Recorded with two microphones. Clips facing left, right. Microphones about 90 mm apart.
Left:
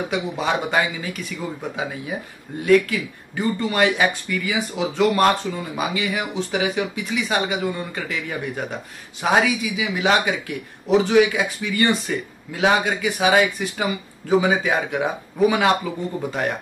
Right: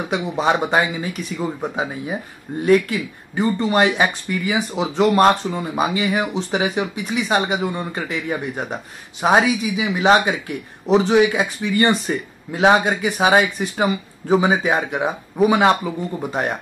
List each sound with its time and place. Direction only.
0.1 s speech: 30° right (ahead or behind)